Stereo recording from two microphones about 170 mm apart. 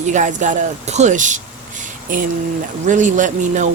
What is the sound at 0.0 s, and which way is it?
Speech, 45° right (ahead or behind).